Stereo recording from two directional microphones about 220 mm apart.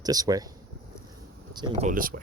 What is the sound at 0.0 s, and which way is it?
Speech, 15° right (ahead or behind).